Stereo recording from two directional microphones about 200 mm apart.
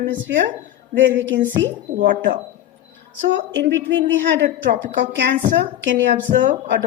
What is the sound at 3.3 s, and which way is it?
A woman's voice, 60° right (ahead or behind).